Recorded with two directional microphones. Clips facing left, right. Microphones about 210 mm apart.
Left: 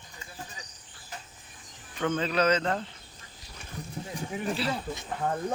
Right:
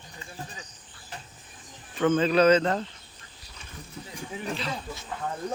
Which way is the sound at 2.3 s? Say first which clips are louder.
Right 5 dB; 30° right (ahead or behind).